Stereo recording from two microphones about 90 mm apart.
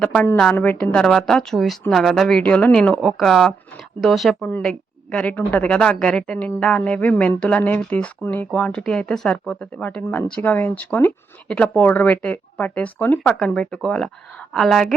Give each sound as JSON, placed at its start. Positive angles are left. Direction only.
{"t": 0.5, "sound": "a woman's voice", "side_deg": 20}
{"t": 2.4, "sound": "a woman's voice", "side_deg": 15}